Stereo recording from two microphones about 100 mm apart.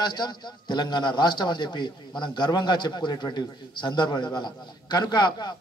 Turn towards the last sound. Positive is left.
turn(degrees=45)  # may be behind; listen again after turning